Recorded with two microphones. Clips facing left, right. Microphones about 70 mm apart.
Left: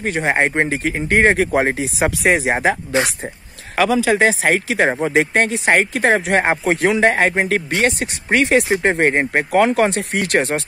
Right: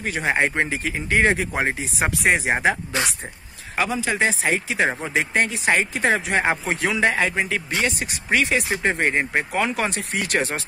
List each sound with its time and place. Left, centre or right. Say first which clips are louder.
0.0 s speech: left 4 dB; left
0.7 s speech: left 5 dB; left
1.8 s speech: left 5 dB; left
2.5 s speech: left 3 dB; left
3.7 s speech: left 8 dB; left
4.8 s speech: left 6 dB; left
5.1 s speech: left 6 dB; left
8.8 s speech: left 5 dB; left